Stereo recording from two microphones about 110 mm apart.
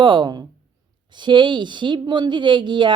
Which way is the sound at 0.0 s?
45° right (ahead or behind).